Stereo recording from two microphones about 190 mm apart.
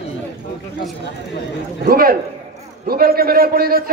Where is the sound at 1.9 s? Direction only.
50° right (ahead or behind).